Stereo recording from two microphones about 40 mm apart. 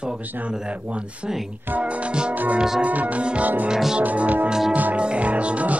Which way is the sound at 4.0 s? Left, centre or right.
Right.